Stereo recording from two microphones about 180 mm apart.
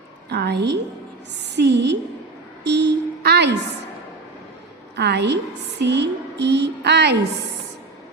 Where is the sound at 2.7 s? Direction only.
70° right (ahead or behind).